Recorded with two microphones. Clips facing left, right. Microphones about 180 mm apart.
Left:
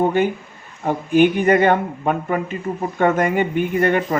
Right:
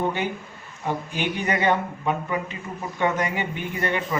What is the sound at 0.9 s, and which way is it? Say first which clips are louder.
A man's voice: left 12 dB; 50° left (ahead or behind).